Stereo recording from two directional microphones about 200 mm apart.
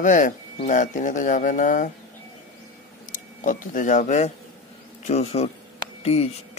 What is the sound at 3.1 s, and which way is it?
Speech, 40° left (ahead or behind).